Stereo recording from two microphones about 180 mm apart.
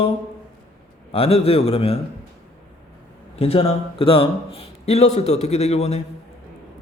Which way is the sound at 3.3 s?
35° left (ahead or behind).